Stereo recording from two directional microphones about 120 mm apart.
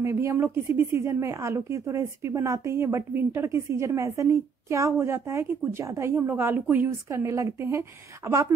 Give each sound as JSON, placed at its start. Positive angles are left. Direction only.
{"t": 0.0, "sound": "speech", "side_deg": -20}